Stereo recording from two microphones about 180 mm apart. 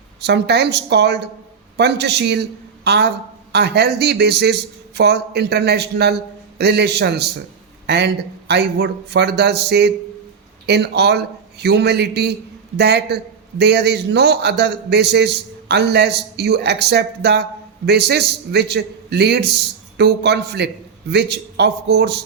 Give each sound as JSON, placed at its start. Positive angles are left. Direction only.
{"t": 0.2, "sound": "a man's voice", "side_deg": -65}